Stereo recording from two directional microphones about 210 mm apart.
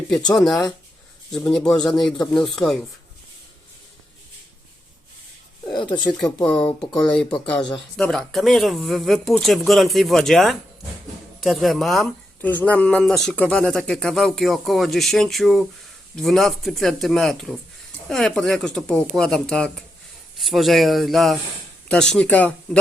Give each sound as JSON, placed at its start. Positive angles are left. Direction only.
{"t": 1.3, "sound": "speech", "side_deg": 5}
{"t": 5.7, "sound": "speech", "side_deg": 20}
{"t": 6.1, "sound": "speech", "side_deg": 5}